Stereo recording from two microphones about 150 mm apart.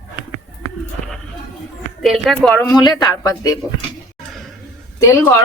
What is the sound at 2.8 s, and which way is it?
Speech, 25° left (ahead or behind).